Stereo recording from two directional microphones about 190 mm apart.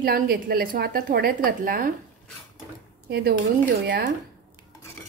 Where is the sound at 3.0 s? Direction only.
60° right (ahead or behind).